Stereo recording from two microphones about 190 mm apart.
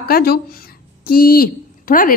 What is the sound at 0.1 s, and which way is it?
Speech, 55° left (ahead or behind).